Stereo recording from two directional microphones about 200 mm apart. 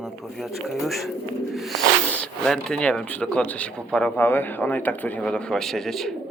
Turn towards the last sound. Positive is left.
turn(degrees=0)  # may be behind; listen again after turning